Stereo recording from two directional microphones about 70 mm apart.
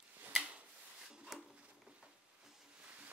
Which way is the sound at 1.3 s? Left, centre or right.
Centre.